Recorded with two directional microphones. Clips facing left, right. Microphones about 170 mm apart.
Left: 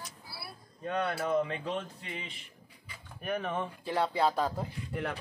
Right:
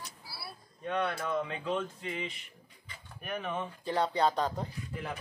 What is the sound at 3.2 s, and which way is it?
Speech, 40° left (ahead or behind).